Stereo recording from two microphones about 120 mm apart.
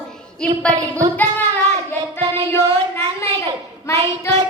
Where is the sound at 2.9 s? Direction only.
20° left (ahead or behind).